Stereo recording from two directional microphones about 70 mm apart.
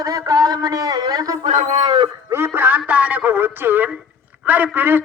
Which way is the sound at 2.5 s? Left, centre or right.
Right.